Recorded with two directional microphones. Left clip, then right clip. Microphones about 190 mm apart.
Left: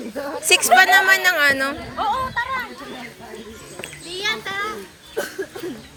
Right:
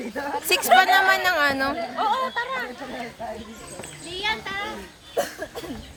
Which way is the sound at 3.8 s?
5° left (ahead or behind).